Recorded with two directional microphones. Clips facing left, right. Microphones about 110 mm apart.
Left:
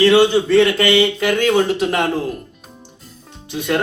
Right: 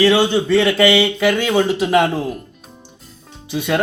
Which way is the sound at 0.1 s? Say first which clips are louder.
Left 2 dB; centre (ahead or behind).